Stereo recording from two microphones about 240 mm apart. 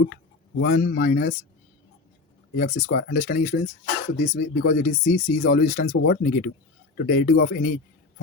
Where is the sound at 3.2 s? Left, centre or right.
Left.